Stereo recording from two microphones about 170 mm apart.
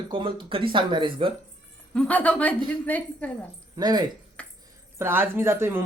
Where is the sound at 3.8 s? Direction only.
25° right (ahead or behind).